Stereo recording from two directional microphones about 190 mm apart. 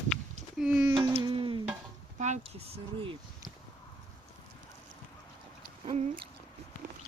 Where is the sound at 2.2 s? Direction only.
40° right (ahead or behind).